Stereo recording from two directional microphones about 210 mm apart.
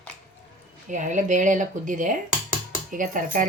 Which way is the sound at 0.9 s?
35° right (ahead or behind).